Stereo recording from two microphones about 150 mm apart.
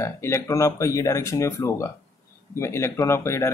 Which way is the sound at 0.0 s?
20° left (ahead or behind).